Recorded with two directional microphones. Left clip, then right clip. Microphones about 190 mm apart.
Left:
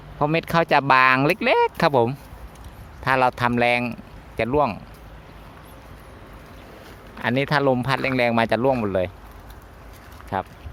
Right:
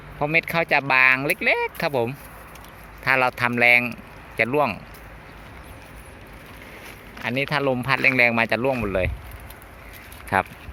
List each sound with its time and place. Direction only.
0.2 s speech: 30° left (ahead or behind); by 4.8 s 15° left (ahead or behind)
7.2 s speech: 25° left (ahead or behind)
10.3 s speech: centre (ahead or behind)